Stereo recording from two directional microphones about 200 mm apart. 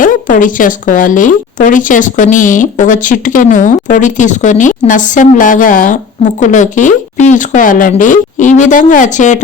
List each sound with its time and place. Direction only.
0.0 s a woman's voice: 40° left (ahead or behind)